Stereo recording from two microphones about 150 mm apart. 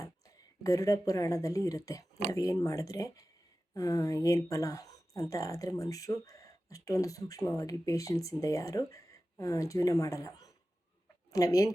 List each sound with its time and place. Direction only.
0.6 s speech: 20° left (ahead or behind)